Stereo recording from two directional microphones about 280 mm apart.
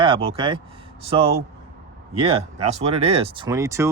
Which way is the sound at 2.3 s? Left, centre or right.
Right.